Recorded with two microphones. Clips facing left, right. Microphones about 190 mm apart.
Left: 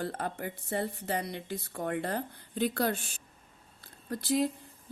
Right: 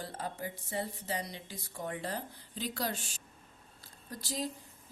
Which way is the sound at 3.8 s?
60° left (ahead or behind).